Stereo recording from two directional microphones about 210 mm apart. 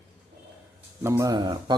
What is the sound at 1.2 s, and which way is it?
Speech, 20° right (ahead or behind).